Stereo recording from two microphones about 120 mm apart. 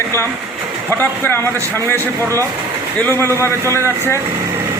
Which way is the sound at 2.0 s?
25° right (ahead or behind).